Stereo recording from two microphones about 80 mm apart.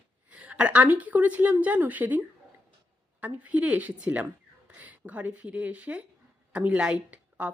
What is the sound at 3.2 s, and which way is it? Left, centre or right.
A woman's voice, centre.